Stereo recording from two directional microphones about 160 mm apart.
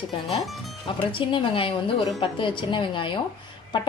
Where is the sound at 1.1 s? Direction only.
30° left (ahead or behind).